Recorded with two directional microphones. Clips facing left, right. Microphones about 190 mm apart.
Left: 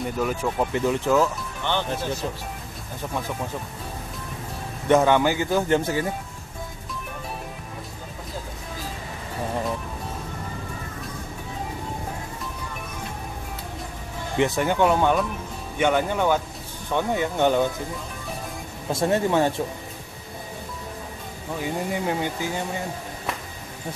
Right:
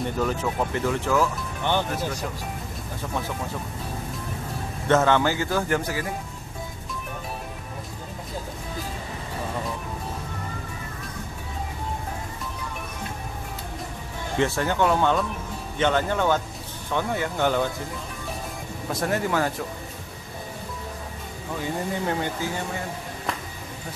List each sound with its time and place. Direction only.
0.2 s speech: 10° left (ahead or behind)
1.7 s speech: 10° right (ahead or behind)
4.8 s speech: 15° left (ahead or behind)
14.4 s speech: 15° left (ahead or behind)
18.9 s speech: 25° left (ahead or behind)
22.0 s speech: 15° left (ahead or behind)